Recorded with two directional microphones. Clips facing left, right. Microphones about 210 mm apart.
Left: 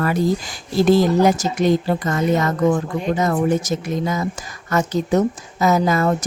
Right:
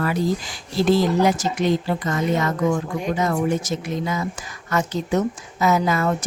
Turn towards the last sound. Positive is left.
turn(degrees=40)  # may be behind; listen again after turning